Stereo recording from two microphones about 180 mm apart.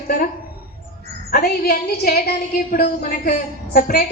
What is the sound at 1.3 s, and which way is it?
A woman's voice, 55° left (ahead or behind).